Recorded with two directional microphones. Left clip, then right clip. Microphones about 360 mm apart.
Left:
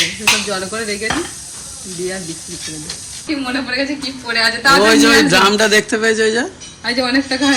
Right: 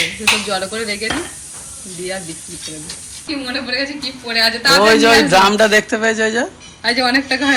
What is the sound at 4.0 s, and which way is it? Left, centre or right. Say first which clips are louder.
A man's voice: even; centre.